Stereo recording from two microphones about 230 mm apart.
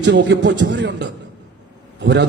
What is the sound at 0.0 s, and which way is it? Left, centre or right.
A man's voice, right.